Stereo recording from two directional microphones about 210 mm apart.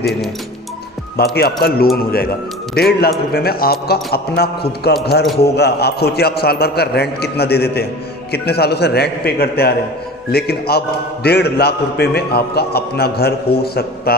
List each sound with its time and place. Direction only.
1.1 s a man's voice: 50° left (ahead or behind)